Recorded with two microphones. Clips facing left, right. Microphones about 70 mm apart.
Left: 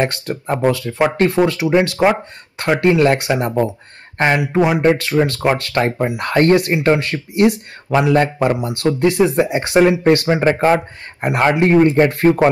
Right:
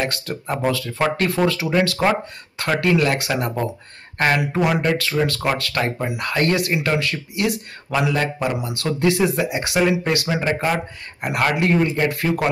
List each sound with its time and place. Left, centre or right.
0.0 s speech: left